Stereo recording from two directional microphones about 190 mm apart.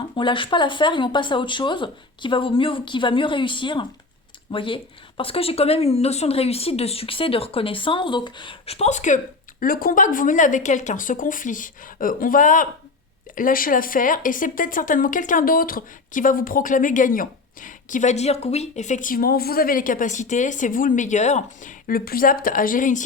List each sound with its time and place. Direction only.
0.2 s a woman's voice: 25° left (ahead or behind); by 23.0 s 45° left (ahead or behind)